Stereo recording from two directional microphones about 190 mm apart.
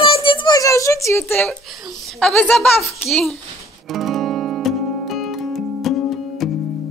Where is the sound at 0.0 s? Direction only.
25° left (ahead or behind); by 1.6 s 10° left (ahead or behind).